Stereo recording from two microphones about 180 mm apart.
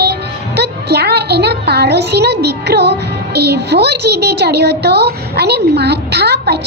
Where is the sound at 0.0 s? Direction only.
65° right (ahead or behind).